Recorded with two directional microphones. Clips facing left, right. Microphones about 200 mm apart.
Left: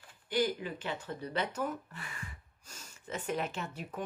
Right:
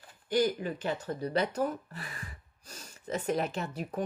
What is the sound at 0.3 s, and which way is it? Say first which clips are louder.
A woman's voice: right 4 dB; 45° right (ahead or behind).